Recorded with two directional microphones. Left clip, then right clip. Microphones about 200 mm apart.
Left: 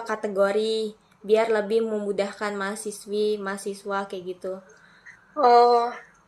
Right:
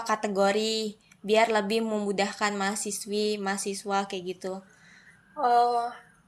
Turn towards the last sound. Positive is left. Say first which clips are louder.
# left 6 dB
turn(degrees=15)  # may be behind; listen again after turning